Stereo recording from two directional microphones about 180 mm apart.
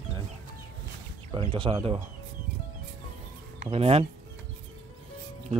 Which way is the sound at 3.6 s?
35° right (ahead or behind).